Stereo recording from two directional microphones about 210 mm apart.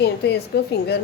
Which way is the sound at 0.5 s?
50° left (ahead or behind).